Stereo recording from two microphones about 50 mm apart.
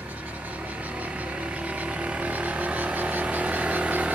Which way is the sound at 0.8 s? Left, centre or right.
Right.